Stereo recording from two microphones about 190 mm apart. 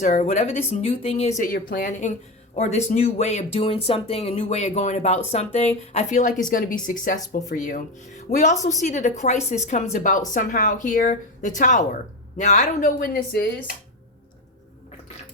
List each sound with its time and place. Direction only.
0.0 s speech: 40° left (ahead or behind)
1.4 s speech: 45° left (ahead or behind)